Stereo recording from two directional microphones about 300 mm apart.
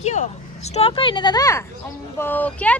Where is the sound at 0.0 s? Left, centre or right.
Left.